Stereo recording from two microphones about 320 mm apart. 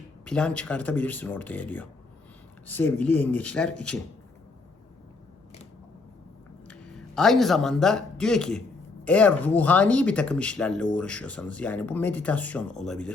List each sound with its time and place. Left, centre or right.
0.3 s speech: centre
6.7 s speech: centre